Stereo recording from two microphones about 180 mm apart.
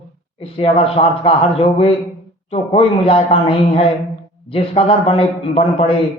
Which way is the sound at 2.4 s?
35° left (ahead or behind).